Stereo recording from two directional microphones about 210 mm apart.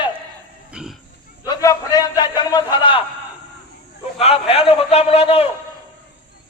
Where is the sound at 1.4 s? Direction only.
15° left (ahead or behind).